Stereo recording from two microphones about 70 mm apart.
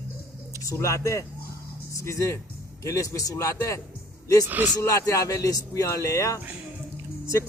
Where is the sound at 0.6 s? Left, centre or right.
Left.